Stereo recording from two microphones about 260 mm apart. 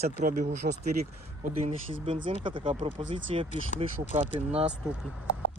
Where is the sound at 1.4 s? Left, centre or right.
Right.